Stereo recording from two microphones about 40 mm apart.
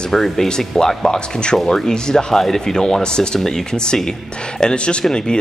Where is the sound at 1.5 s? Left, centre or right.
Centre.